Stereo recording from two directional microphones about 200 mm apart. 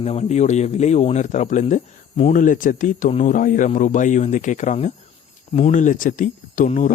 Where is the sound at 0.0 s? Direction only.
30° left (ahead or behind).